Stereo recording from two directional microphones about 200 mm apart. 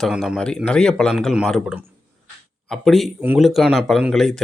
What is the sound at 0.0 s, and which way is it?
Speech, centre (ahead or behind).